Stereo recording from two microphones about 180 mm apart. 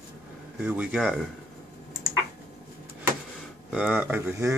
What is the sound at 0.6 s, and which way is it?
Speech, 5° right (ahead or behind).